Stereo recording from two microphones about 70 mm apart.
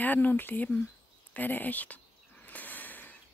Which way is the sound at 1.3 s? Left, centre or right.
Left.